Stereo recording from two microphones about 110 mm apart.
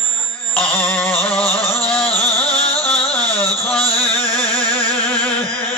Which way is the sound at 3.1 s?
10° left (ahead or behind).